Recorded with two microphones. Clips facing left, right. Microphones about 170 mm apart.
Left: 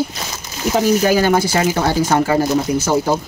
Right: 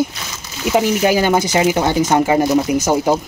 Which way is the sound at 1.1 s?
20° right (ahead or behind).